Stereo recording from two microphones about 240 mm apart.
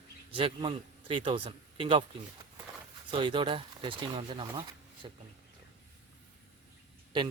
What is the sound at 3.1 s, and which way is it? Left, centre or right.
Speech, centre.